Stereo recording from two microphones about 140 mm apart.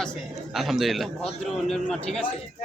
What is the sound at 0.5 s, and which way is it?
Speech, centre (ahead or behind).